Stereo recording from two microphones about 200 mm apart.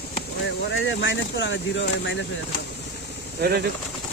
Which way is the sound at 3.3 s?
55° right (ahead or behind).